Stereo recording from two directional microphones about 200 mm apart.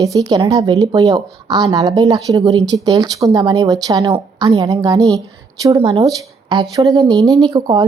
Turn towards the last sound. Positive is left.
turn(degrees=-20)  # may be behind; listen again after turning